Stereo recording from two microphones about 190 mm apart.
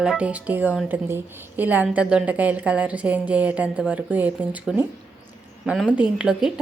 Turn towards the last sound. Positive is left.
turn(degrees=-5)  # may be behind; listen again after turning